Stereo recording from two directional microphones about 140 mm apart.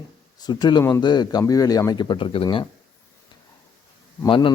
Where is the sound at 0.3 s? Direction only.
30° left (ahead or behind).